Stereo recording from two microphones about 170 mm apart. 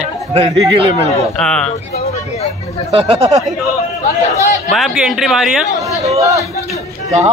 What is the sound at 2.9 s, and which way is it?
Speech, 35° right (ahead or behind).